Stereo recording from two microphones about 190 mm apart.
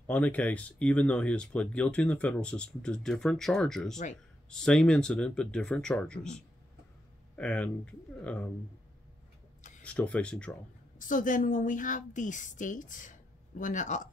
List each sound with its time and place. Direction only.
0.0 s speech: 10° left (ahead or behind)
7.3 s speech: 5° left (ahead or behind)
9.8 s speech: 5° left (ahead or behind)
11.0 s a woman's voice: 45° left (ahead or behind)